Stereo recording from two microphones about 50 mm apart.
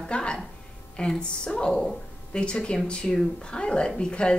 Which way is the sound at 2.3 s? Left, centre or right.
Centre.